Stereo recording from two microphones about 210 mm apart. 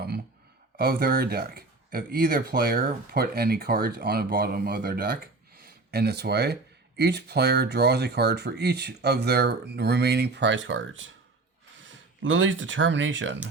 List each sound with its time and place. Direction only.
0.8 s speech: 45° right (ahead or behind); by 13.4 s 60° right (ahead or behind)